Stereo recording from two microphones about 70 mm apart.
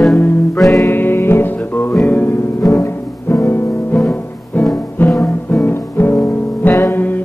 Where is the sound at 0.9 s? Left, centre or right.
Left.